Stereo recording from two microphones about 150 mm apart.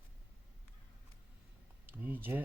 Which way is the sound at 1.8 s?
10° right (ahead or behind).